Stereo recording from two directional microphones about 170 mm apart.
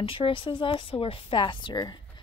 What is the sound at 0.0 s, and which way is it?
Speech, 30° left (ahead or behind).